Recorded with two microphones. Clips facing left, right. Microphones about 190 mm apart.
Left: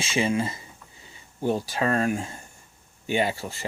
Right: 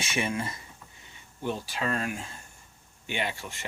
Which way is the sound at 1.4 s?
40° left (ahead or behind).